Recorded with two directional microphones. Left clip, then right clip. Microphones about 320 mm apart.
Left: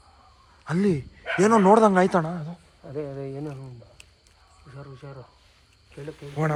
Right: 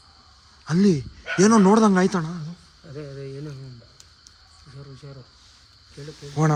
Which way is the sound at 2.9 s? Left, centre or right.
Centre.